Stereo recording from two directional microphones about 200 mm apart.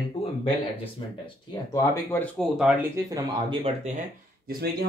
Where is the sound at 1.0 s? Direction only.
25° left (ahead or behind).